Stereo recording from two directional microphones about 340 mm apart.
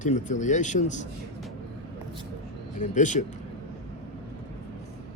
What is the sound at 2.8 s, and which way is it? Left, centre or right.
Speech, left.